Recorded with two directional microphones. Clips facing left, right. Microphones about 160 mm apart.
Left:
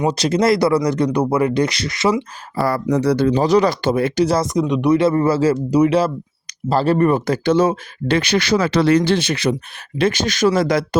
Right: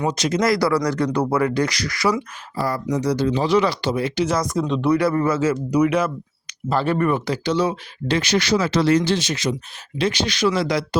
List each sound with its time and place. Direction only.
0.1 s speech: 30° left (ahead or behind)
2.6 s speech: 65° left (ahead or behind)
3.3 s speech: 40° left (ahead or behind)
4.4 s speech: 15° left (ahead or behind); by 7.3 s 35° left (ahead or behind)
7.4 s speech: 50° left (ahead or behind)
10.0 s speech: 50° left (ahead or behind)